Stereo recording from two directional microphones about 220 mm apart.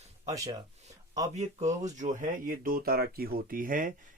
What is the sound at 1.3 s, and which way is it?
Speech, 30° right (ahead or behind).